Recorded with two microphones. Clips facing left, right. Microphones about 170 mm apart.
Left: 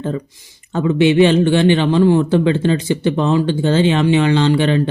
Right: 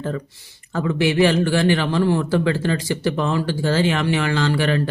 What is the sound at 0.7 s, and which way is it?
Speech, 20° left (ahead or behind).